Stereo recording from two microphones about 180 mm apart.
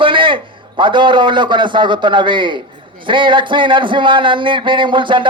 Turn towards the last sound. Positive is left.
turn(degrees=-25)  # may be behind; listen again after turning